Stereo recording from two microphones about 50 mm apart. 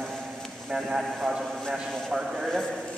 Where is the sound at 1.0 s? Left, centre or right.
Centre.